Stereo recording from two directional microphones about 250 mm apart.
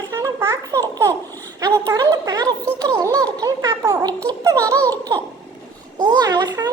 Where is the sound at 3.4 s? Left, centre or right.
Centre.